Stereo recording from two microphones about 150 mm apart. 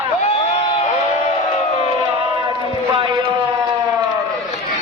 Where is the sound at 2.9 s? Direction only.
35° right (ahead or behind).